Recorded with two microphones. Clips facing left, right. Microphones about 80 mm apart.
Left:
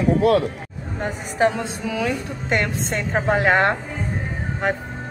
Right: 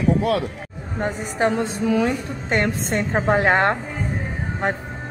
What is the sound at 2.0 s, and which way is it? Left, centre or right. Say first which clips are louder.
A woman's voice: right 2 dB; right.